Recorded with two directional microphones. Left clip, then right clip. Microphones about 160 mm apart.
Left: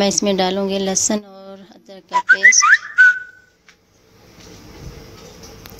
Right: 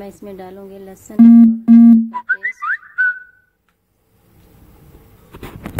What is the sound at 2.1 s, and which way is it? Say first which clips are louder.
Whistling: left 10 dB; 35° left (ahead or behind).